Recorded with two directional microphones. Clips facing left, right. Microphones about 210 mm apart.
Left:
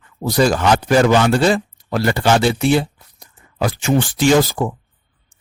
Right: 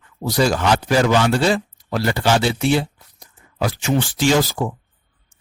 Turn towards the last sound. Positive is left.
turn(degrees=50)  # may be behind; listen again after turning